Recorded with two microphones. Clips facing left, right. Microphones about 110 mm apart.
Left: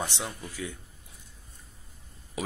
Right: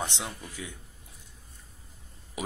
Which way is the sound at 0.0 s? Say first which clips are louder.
Left 1 dB; 20° right (ahead or behind).